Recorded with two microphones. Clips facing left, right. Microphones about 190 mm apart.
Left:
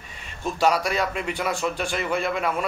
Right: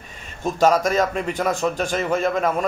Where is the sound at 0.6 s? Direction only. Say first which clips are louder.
Right 5 dB; 45° right (ahead or behind).